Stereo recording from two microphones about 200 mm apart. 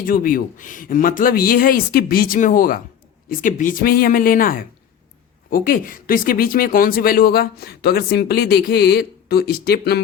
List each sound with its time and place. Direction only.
0.0 s speech: 45° left (ahead or behind)